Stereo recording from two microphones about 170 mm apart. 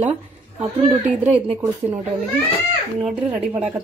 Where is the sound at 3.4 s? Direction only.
5° right (ahead or behind).